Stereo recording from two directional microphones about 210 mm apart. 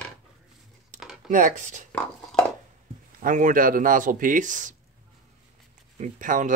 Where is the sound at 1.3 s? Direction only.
35° right (ahead or behind).